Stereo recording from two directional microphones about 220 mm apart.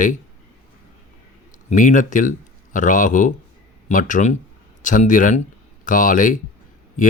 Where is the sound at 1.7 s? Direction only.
35° left (ahead or behind).